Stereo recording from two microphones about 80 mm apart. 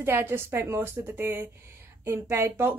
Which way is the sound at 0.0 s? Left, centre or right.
Right.